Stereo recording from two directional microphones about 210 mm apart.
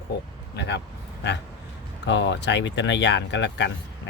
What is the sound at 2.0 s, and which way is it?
Speech, 60° left (ahead or behind).